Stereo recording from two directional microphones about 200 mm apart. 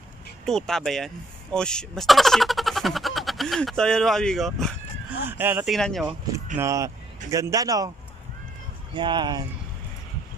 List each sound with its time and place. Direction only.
0.5 s speech: centre (ahead or behind)
5.2 s speech: 10° right (ahead or behind)
5.7 s speech: centre (ahead or behind)
6.6 s a man's voice: 15° right (ahead or behind)
8.9 s speech: 25° right (ahead or behind)